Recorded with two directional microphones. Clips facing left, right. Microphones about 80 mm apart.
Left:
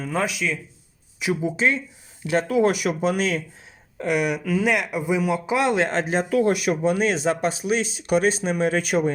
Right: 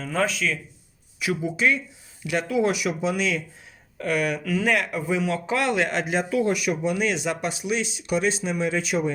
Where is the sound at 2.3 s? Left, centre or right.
Left.